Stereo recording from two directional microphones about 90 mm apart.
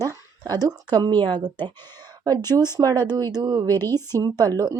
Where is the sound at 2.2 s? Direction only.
45° right (ahead or behind).